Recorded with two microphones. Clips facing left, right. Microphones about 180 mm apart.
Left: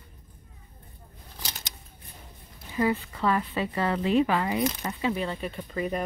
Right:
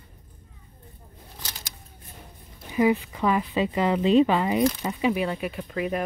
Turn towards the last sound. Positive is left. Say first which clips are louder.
# right 2 dB
turn(degrees=-5)  # may be behind; listen again after turning